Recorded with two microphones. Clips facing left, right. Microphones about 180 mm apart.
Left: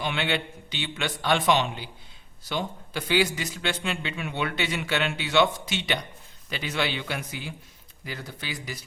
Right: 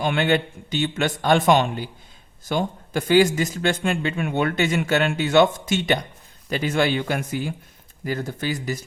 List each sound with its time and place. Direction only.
0.0 s speech: 45° right (ahead or behind)